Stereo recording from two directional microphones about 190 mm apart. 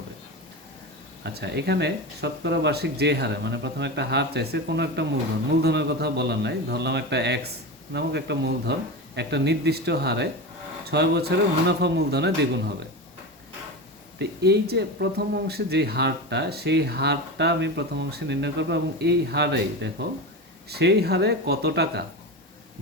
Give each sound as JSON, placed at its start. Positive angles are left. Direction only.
{"t": 1.2, "sound": "speech", "side_deg": -60}
{"t": 14.2, "sound": "speech", "side_deg": -60}